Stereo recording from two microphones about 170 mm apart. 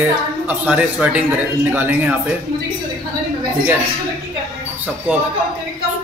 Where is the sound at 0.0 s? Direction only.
10° right (ahead or behind).